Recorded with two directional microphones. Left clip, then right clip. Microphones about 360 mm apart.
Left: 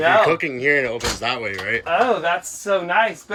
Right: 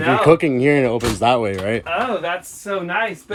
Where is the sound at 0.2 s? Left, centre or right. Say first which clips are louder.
Right 3 dB; centre.